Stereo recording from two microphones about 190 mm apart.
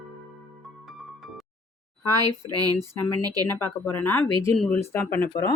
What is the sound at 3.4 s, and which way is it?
Speech, 10° left (ahead or behind).